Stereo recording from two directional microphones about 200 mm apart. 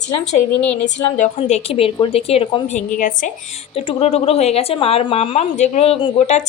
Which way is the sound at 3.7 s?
30° left (ahead or behind).